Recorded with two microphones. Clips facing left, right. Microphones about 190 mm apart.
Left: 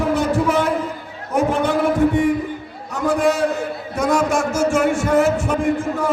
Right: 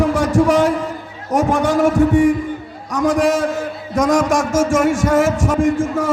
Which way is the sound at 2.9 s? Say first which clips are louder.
Right 4 dB; 90° right.